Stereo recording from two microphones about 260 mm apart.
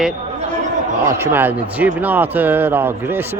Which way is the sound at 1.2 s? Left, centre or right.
Centre.